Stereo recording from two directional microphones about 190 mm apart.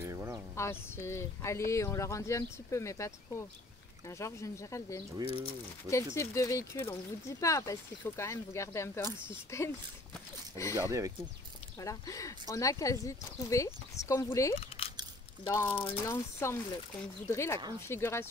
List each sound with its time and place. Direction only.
0.0 s a sound: 15° right (ahead or behind)
0.6 s speech: 15° left (ahead or behind)
10.8 s speech: 15° right (ahead or behind)
11.8 s speech: 15° left (ahead or behind)
14.5 s speech: 30° left (ahead or behind)
15.4 s speech: 15° left (ahead or behind)